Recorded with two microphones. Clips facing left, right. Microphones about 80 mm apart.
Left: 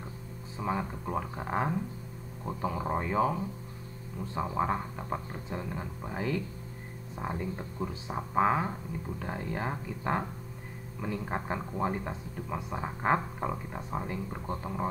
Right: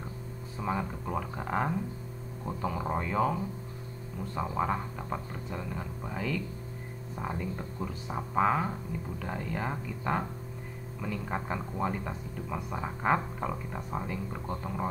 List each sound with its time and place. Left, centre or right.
0.6 s speech: centre
4.6 s speech: left
8.1 s speech: centre
12.1 s speech: centre
12.8 s speech: left
13.5 s speech: centre